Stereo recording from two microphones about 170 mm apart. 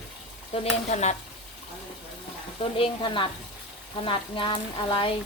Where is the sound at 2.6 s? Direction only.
30° left (ahead or behind).